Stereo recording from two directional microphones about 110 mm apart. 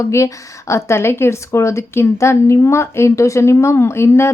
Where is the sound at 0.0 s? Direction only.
25° left (ahead or behind).